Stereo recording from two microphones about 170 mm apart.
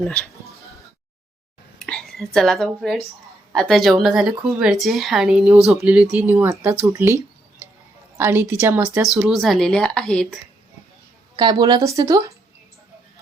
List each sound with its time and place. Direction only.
1.8 s a woman's voice: centre (ahead or behind); by 7.2 s 15° right (ahead or behind)
8.2 s speech: 10° right (ahead or behind)
9.2 s speech: centre (ahead or behind)
11.3 s speech: 25° right (ahead or behind)